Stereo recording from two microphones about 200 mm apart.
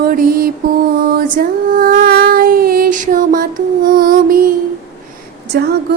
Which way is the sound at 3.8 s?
45° right (ahead or behind).